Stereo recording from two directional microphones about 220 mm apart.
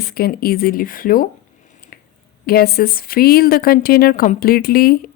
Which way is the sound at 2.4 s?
45° left (ahead or behind).